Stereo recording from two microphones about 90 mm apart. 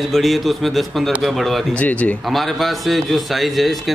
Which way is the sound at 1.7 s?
15° left (ahead or behind).